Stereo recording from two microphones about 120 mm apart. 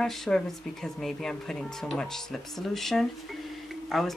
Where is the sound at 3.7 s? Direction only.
Centre (ahead or behind).